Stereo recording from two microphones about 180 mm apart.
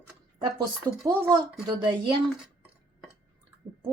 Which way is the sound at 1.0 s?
15° right (ahead or behind).